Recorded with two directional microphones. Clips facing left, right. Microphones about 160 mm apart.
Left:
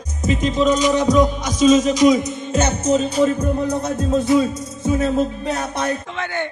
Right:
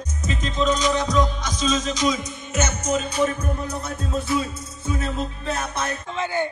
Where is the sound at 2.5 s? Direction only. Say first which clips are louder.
Left 6 dB; 35° left (ahead or behind).